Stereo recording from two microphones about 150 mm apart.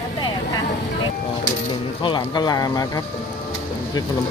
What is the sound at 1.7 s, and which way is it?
Speech, 35° left (ahead or behind).